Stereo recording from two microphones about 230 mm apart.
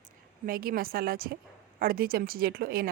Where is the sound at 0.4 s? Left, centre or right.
Right.